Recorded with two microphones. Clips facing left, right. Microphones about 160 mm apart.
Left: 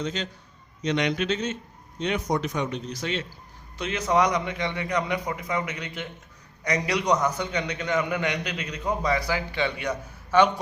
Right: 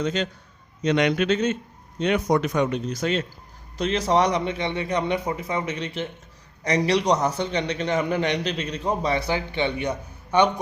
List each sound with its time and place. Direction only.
0.0 s speech: 55° right (ahead or behind)
3.8 s a man's voice: 35° right (ahead or behind)